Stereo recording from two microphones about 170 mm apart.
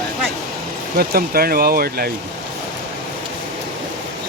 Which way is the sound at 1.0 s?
60° right (ahead or behind).